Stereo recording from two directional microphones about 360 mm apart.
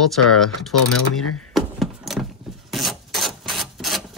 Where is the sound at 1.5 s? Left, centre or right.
Centre.